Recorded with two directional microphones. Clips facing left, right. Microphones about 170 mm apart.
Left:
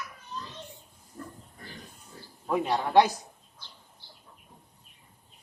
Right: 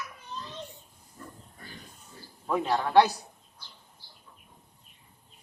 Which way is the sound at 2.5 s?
15° left (ahead or behind).